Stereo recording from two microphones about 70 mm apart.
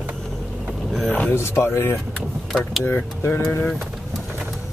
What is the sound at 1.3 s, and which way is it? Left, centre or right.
Speech, left.